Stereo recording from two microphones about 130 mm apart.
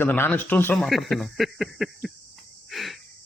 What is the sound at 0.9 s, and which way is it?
Speech, centre (ahead or behind).